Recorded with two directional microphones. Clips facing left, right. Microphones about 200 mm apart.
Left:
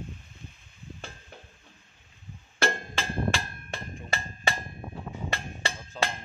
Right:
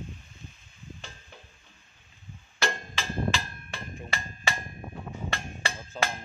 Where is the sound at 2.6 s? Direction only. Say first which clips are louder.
Left 3 dB; 55° left (ahead or behind).